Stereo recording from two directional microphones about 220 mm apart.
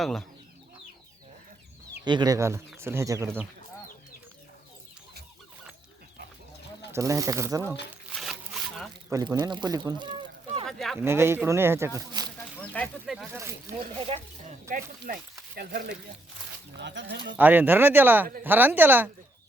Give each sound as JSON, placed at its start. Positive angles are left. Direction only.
{"t": 0.0, "sound": "speech", "side_deg": 0}
{"t": 2.0, "sound": "speech", "side_deg": -20}
{"t": 6.9, "sound": "speech", "side_deg": -15}
{"t": 8.1, "sound": "zipper", "side_deg": 0}
{"t": 9.1, "sound": "speech", "side_deg": -20}
{"t": 10.7, "sound": "speech", "side_deg": 0}
{"t": 11.0, "sound": "speech", "side_deg": -10}
{"t": 12.6, "sound": "speech", "side_deg": 5}
{"t": 13.7, "sound": "speech", "side_deg": -30}
{"t": 16.7, "sound": "speech", "side_deg": -55}
{"t": 17.3, "sound": "speech", "side_deg": -10}